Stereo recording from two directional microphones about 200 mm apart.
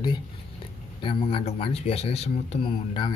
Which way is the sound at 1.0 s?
30° left (ahead or behind).